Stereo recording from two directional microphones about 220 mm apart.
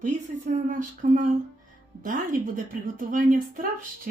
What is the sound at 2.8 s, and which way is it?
Speech, 35° right (ahead or behind).